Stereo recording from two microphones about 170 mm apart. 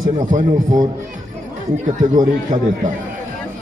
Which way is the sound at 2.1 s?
50° right (ahead or behind).